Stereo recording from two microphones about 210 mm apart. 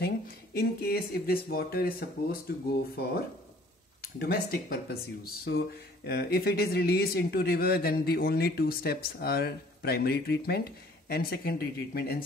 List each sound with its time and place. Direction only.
0.6 s speech: 45° left (ahead or behind)
4.0 s speech: 45° left (ahead or behind)